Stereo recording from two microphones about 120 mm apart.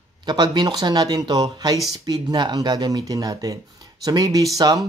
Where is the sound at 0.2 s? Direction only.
35° right (ahead or behind).